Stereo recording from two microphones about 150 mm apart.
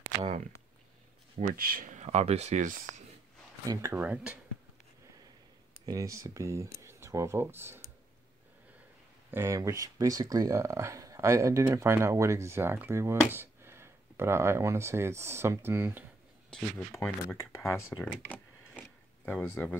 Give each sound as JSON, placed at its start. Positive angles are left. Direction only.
{"t": 1.4, "sound": "speech", "side_deg": -70}
{"t": 3.6, "sound": "speech", "side_deg": -20}
{"t": 5.9, "sound": "speech", "side_deg": -20}
{"t": 9.3, "sound": "speech", "side_deg": -20}
{"t": 16.4, "sound": "speech", "side_deg": 5}
{"t": 17.4, "sound": "speech", "side_deg": 15}
{"t": 18.3, "sound": "a sound", "side_deg": 10}